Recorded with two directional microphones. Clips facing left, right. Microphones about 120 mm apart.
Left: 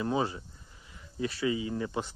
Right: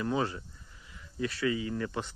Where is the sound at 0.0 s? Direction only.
25° left (ahead or behind).